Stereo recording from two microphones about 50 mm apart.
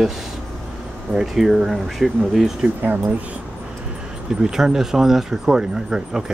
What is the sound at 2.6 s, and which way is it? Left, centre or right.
Speech, right.